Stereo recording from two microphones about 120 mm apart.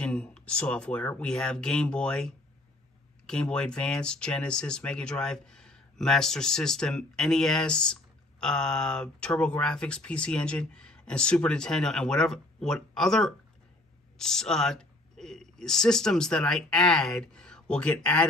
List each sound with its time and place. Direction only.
0.0 s speech: 5° left (ahead or behind)